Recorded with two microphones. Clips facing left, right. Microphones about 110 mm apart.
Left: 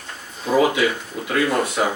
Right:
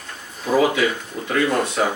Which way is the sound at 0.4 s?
15° left (ahead or behind).